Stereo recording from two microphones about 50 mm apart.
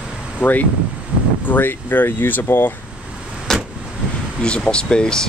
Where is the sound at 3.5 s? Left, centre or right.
Centre.